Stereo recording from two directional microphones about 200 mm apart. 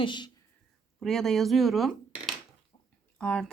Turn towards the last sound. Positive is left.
turn(degrees=5)  # may be behind; listen again after turning